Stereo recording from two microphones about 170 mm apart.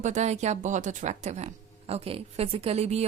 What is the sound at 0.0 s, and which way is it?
Speech, 45° right (ahead or behind).